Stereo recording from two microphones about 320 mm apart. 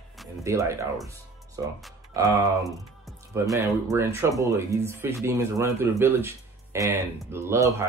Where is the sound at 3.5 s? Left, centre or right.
Centre.